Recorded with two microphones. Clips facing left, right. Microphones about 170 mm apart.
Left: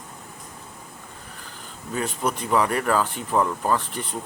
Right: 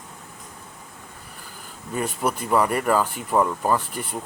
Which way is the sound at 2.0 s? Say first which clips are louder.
Right 1 dB; 5° right (ahead or behind).